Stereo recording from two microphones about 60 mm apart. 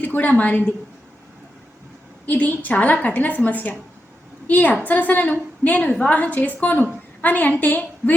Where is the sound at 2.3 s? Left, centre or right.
Left.